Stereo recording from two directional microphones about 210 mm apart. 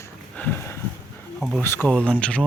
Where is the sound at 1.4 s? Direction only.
Centre (ahead or behind).